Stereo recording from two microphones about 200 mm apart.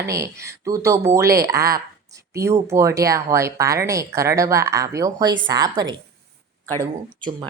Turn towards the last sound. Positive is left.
turn(degrees=-20)  # may be behind; listen again after turning